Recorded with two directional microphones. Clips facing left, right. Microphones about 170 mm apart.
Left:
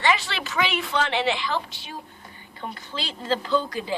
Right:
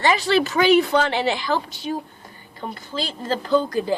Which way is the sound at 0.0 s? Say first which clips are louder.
Right 6 dB; 40° right (ahead or behind).